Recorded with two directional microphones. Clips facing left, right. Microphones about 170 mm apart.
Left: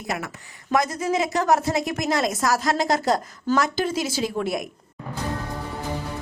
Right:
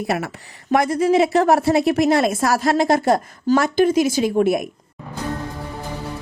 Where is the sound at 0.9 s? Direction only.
30° right (ahead or behind).